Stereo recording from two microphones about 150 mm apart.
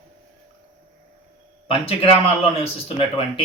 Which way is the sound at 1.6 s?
40° left (ahead or behind).